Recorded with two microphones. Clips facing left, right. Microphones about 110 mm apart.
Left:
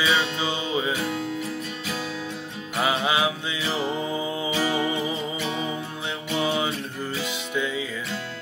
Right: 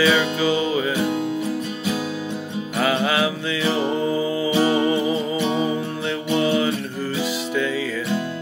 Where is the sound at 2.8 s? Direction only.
15° left (ahead or behind).